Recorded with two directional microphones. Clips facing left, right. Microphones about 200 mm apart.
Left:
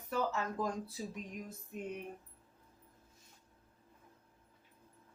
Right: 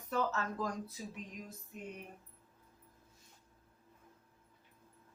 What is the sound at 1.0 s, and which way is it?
Speech, 35° left (ahead or behind).